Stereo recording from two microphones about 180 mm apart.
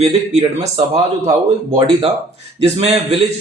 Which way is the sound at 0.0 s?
35° right (ahead or behind).